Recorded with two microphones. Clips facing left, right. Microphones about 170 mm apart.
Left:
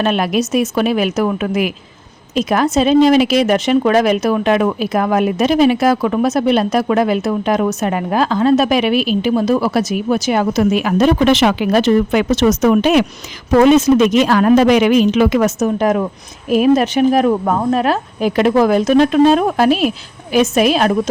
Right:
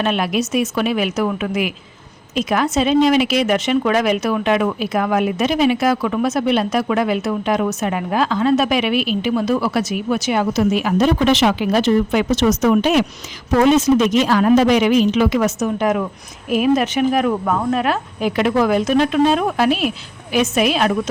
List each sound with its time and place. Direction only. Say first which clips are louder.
0.0 s speech: left 3 dB; 40° left (ahead or behind)